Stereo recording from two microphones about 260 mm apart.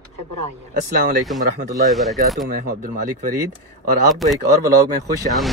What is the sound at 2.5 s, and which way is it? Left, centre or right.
Speech, right.